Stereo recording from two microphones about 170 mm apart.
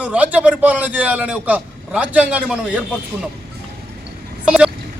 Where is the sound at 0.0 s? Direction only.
5° right (ahead or behind).